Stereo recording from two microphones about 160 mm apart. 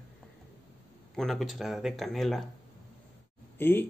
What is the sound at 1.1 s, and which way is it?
Speech, centre (ahead or behind).